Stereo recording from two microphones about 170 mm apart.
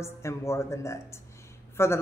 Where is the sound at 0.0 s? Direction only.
15° left (ahead or behind).